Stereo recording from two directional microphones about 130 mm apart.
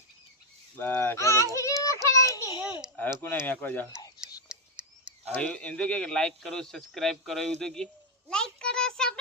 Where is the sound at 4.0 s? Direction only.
30° left (ahead or behind).